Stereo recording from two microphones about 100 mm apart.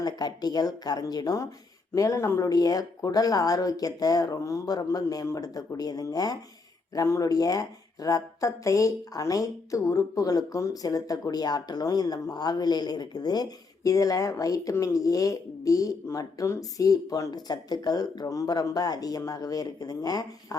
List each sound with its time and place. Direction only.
0.0 s speech: 40° left (ahead or behind)